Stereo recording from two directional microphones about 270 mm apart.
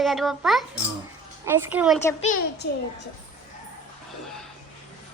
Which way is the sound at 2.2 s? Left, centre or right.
Left.